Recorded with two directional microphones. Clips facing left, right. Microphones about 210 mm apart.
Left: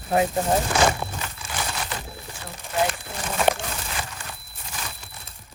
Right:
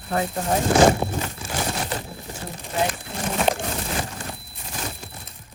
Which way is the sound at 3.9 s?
35° right (ahead or behind).